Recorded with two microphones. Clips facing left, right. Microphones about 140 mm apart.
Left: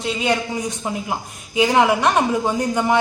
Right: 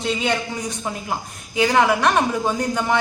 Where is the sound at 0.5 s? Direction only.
15° left (ahead or behind).